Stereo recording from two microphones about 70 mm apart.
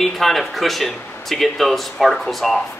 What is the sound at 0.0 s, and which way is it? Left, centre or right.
Speech, centre.